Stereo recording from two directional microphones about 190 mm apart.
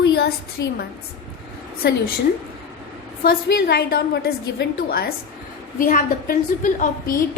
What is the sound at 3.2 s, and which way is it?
A woman's voice, 55° left (ahead or behind).